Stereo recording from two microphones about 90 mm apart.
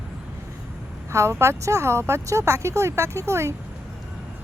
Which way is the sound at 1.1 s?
30° right (ahead or behind).